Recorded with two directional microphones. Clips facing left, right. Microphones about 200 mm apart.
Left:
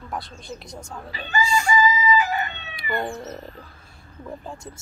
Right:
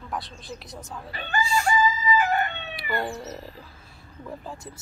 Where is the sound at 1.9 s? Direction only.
55° right (ahead or behind).